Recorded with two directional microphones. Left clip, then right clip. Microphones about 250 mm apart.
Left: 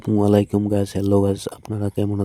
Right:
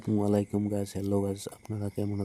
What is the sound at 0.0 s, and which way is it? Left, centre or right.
Speech, left.